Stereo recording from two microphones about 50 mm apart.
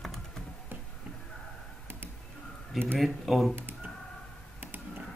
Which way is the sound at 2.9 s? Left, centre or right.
Centre.